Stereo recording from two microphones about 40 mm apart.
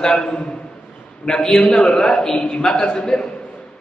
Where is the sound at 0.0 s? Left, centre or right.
Centre.